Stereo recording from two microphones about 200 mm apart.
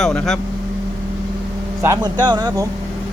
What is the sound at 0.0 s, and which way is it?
Speech, centre (ahead or behind).